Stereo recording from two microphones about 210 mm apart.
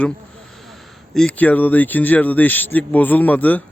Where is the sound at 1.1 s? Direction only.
5° left (ahead or behind).